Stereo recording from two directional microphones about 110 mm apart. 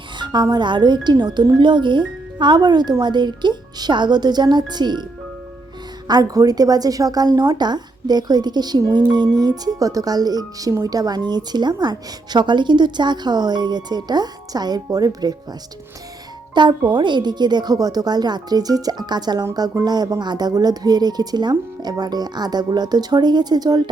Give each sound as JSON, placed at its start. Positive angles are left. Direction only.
{"t": 0.2, "sound": "music", "side_deg": -40}
{"t": 0.5, "sound": "speech", "side_deg": -45}
{"t": 6.1, "sound": "speech", "side_deg": -35}
{"t": 16.6, "sound": "speech", "side_deg": -45}